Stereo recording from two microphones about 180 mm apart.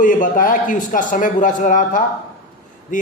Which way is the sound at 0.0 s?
50° left (ahead or behind).